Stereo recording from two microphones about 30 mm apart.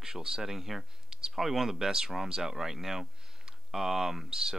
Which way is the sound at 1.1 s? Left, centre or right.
Right.